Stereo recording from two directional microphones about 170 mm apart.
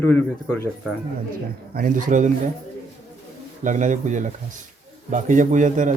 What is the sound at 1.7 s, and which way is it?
Speech, 55° right (ahead or behind).